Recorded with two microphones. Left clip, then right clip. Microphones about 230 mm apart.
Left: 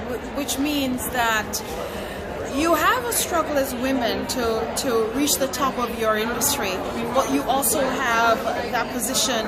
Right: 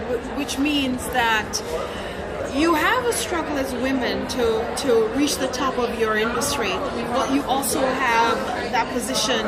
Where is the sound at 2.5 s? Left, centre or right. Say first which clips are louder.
Even; left.